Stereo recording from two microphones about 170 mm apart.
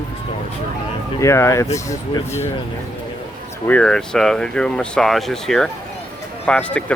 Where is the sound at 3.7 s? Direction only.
5° left (ahead or behind).